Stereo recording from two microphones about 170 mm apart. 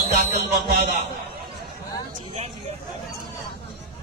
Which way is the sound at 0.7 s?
65° right (ahead or behind).